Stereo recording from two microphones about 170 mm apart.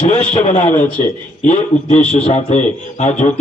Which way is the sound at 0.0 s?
30° left (ahead or behind).